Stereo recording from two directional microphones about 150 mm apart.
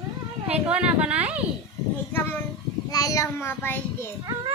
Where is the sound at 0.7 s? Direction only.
10° right (ahead or behind).